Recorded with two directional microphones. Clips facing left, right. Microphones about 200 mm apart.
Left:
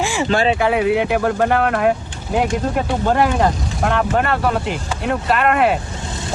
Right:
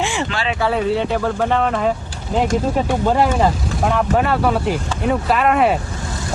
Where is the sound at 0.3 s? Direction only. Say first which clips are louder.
Left 7 dB; 40° left (ahead or behind).